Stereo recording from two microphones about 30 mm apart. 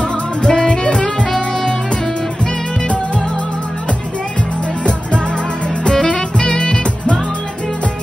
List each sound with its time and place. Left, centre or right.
0.0 s music: left
6.3 s music: left